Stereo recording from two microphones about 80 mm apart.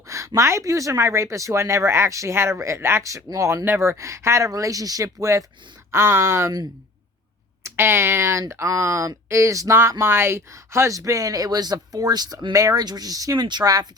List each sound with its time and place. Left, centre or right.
0.3 s speech: right
5.9 s speech: right
7.6 s speech: right
12.5 s speech: right